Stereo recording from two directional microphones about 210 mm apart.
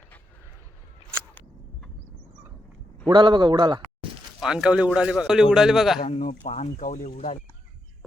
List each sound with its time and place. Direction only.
3.1 s speech: 20° right (ahead or behind)
4.4 s a man's voice: 5° right (ahead or behind)
6.0 s speech: 30° left (ahead or behind)